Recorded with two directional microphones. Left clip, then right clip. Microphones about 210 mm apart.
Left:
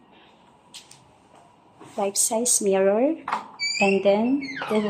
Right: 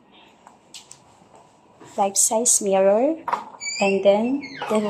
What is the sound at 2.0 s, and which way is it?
Speech, 5° left (ahead or behind).